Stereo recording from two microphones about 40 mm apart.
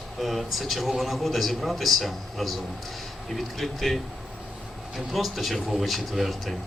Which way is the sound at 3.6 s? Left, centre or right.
Centre.